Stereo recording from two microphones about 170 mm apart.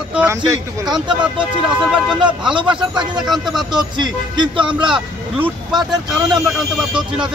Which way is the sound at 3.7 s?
25° right (ahead or behind).